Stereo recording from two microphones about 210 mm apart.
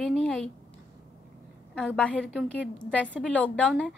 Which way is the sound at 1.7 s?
5° left (ahead or behind).